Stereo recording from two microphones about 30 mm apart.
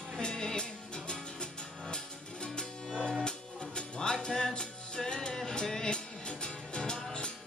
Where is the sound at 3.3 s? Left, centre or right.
Left.